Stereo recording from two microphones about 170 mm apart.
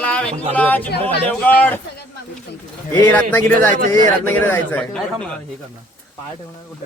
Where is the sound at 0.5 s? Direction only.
10° left (ahead or behind).